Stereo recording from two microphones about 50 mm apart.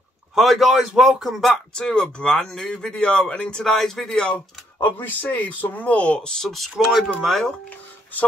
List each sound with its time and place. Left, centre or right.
0.4 s speech: centre
1.8 s speech: centre
4.7 s speech: left; by 6.4 s centre
6.4 s speech: centre
6.8 s speech: centre
7.2 s speech: centre